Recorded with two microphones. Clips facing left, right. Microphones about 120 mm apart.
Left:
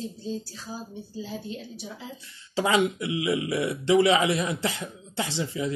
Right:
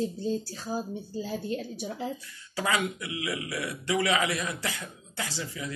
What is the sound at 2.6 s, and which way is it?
Speech, 25° left (ahead or behind).